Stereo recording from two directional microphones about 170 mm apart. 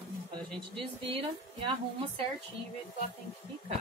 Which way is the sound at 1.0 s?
30° right (ahead or behind).